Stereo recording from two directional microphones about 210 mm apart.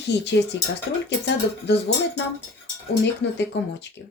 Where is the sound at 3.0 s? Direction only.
55° left (ahead or behind).